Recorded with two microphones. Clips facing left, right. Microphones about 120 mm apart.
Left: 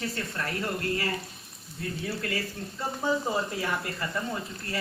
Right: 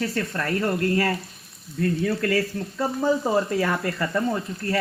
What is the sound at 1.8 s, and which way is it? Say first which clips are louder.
Speech: right 10 dB; 80° right.